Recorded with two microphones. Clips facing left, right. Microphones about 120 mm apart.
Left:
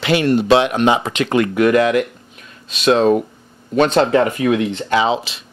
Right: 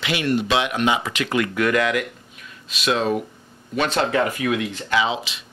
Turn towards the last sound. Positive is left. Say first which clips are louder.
# left 5 dB
turn(degrees=35)  # may be behind; listen again after turning